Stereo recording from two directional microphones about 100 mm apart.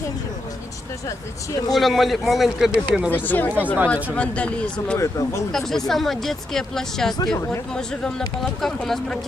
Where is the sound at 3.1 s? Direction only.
20° left (ahead or behind).